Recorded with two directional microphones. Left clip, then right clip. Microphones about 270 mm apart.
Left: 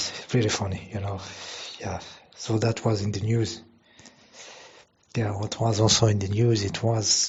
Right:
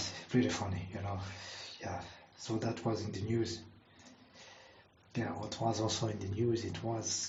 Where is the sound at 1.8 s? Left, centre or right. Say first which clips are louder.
Left 5 dB; left.